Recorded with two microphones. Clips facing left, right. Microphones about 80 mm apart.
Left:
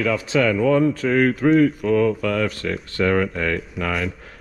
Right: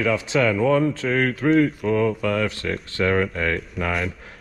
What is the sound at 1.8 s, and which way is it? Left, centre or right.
Speech, right.